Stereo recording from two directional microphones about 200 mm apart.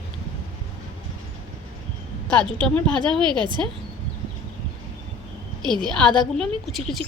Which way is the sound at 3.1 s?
25° right (ahead or behind).